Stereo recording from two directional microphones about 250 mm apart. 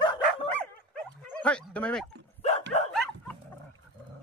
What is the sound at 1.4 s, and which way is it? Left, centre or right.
Dog, centre.